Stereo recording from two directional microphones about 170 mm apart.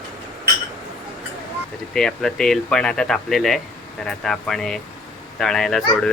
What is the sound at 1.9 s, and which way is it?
Speech, 5° left (ahead or behind).